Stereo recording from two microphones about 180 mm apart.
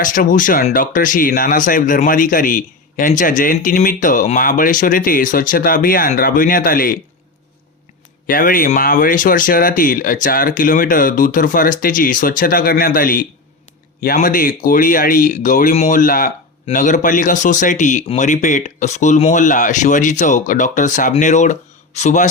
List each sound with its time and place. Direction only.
0.0 s speech: 50° left (ahead or behind)
8.3 s speech: 50° left (ahead or behind)